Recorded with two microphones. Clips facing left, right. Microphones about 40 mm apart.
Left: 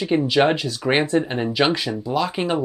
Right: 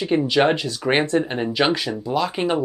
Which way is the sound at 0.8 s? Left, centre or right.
Centre.